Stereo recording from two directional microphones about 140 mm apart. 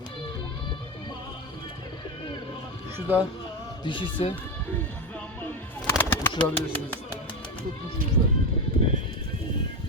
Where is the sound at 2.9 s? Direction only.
10° right (ahead or behind).